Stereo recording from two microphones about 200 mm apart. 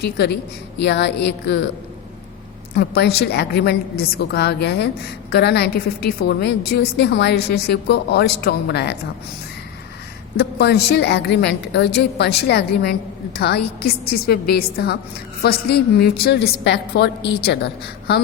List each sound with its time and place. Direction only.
0.0 s a woman's voice: 55° left (ahead or behind)
2.7 s a woman's voice: 55° left (ahead or behind)
10.3 s a woman's voice: 55° left (ahead or behind)